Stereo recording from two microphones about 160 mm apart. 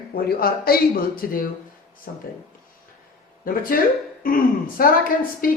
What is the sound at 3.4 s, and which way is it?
A woman's voice, 60° left (ahead or behind).